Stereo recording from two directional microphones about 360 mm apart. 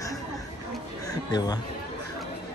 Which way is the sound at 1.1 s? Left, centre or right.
Centre.